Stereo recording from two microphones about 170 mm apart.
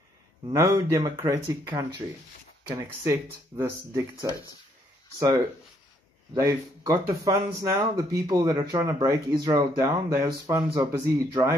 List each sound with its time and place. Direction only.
0.5 s speech: 20° right (ahead or behind)
6.3 s speech: 20° right (ahead or behind)